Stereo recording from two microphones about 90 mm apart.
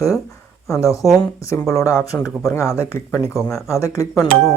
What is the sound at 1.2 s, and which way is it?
Speech, 35° left (ahead or behind).